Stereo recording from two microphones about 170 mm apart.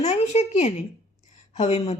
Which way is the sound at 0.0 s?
45° left (ahead or behind).